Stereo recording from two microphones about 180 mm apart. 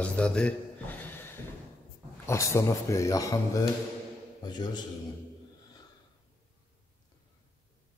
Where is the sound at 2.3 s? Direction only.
15° left (ahead or behind).